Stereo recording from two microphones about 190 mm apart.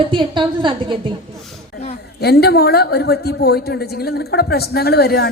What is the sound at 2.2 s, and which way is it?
A woman's voice, 55° left (ahead or behind).